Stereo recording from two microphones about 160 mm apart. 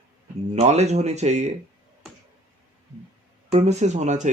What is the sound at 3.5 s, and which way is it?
Speech, 45° right (ahead or behind).